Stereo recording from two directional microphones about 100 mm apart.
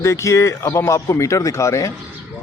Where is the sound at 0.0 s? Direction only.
30° left (ahead or behind).